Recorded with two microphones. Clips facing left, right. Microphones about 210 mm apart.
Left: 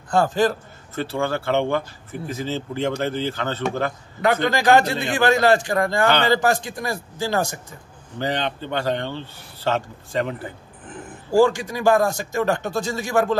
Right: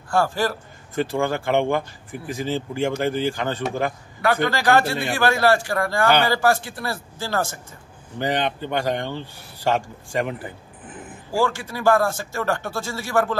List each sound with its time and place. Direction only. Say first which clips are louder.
0.1 s a man's voice: left 3 dB; 20° left (ahead or behind)
0.9 s speech: right 1 dB; 15° right (ahead or behind)
4.2 s a man's voice: left 1 dB; 20° left (ahead or behind)
8.2 s speech: right 1 dB; 15° right (ahead or behind)
11.3 s speech: left 6 dB; 15° left (ahead or behind)